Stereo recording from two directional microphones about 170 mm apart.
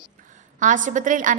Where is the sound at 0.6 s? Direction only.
50° right (ahead or behind).